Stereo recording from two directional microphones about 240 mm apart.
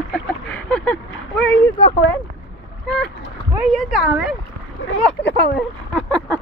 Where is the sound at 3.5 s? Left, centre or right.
Centre.